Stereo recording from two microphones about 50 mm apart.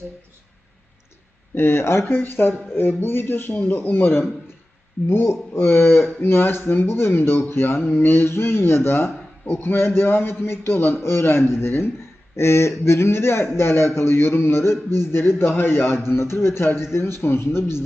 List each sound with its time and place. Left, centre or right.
1.5 s speech: left
3.9 s a man's voice: left